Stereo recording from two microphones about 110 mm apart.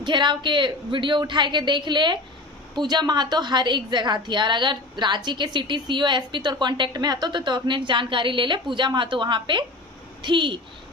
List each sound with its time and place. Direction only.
0.0 s a woman's voice: 45° right (ahead or behind)